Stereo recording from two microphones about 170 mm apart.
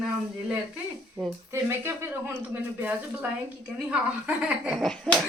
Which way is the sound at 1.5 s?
15° right (ahead or behind).